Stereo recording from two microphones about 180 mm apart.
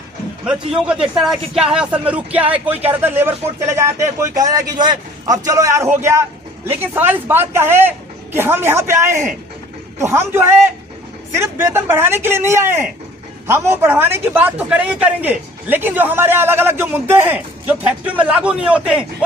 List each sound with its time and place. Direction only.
1.0 s speech: 5° right (ahead or behind)